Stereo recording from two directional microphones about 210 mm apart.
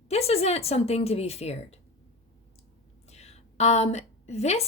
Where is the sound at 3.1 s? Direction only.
30° left (ahead or behind).